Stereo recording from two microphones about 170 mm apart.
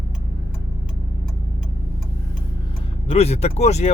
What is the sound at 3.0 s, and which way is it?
Speech, 40° left (ahead or behind).